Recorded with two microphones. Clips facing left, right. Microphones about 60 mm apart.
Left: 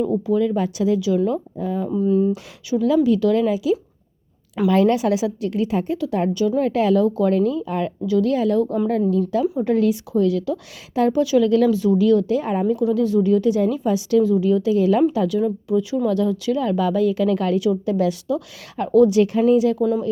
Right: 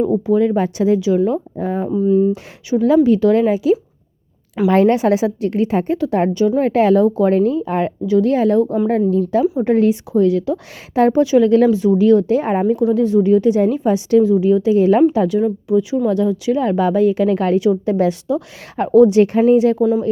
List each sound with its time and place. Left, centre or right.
0.0 s a woman's voice: right
1.5 s a woman's voice: right
1.9 s speech: centre
2.3 s a woman's voice: right
8.0 s a woman's voice: right
8.6 s speech: centre
8.9 s a woman's voice: right
12.7 s a woman's voice: right